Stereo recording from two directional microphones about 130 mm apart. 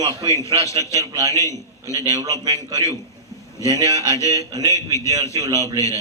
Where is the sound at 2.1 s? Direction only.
30° right (ahead or behind).